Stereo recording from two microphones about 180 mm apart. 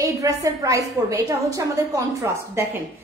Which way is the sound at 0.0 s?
20° right (ahead or behind).